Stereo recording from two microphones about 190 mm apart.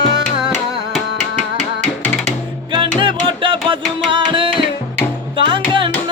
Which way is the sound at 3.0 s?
25° right (ahead or behind).